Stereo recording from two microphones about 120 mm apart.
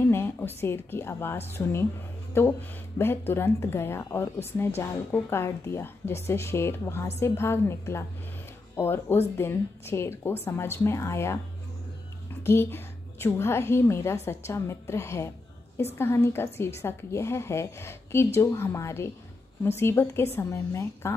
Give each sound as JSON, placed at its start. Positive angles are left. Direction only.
{"t": 0.0, "sound": "a woman's voice", "side_deg": 20}
{"t": 12.4, "sound": "a woman's voice", "side_deg": 20}